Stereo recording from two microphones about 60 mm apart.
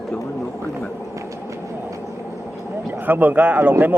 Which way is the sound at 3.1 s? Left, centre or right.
Right.